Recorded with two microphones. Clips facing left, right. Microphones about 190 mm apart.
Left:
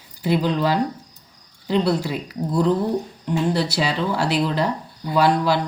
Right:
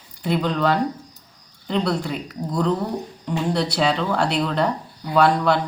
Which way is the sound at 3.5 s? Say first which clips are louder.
Right 1 dB; 5° left (ahead or behind).